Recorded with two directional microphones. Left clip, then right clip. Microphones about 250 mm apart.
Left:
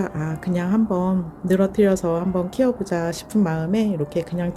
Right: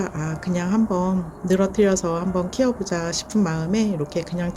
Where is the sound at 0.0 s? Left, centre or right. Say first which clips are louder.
Left 1 dB; centre.